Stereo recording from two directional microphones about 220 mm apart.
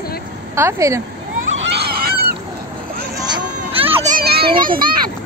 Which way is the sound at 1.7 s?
45° right (ahead or behind).